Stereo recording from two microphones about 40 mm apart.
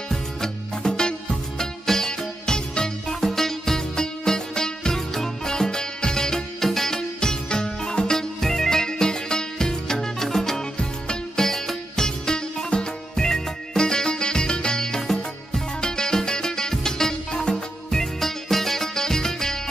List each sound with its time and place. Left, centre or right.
0.1 s music: centre